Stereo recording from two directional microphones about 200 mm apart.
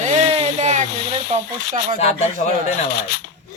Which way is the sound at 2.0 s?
30° left (ahead or behind).